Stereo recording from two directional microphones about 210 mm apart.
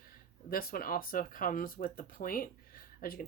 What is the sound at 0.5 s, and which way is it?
Speech, 45° left (ahead or behind).